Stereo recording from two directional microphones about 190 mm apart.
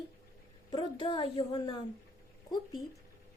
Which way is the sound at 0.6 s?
25° left (ahead or behind).